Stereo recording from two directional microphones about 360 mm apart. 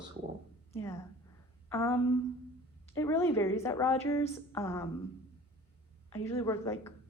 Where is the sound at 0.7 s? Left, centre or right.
Centre.